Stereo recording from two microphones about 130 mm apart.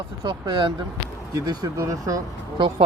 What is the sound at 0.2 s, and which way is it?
Speech, 35° right (ahead or behind).